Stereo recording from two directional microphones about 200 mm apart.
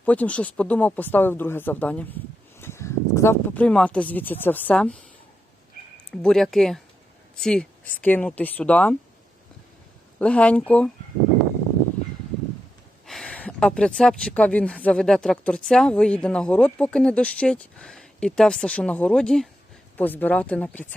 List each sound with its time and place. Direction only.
0.0 s speech: 5° left (ahead or behind)
6.1 s speech: centre (ahead or behind)
10.2 s speech: 5° left (ahead or behind)
13.1 s speech: 5° left (ahead or behind)